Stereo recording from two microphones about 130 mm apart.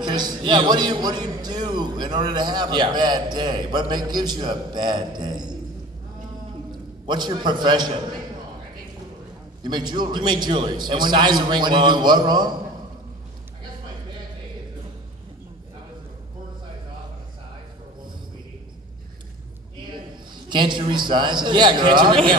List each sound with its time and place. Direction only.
0.0 s a man's voice: 35° right (ahead or behind)
7.1 s a man's voice: 35° right (ahead or behind)
9.6 s a man's voice: 35° right (ahead or behind)
20.4 s a man's voice: 35° right (ahead or behind)